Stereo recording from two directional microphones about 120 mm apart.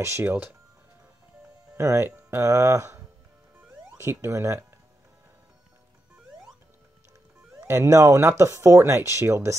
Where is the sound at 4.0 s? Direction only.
25° right (ahead or behind).